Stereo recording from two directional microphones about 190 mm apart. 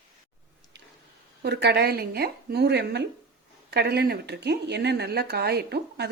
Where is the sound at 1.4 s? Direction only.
60° right (ahead or behind).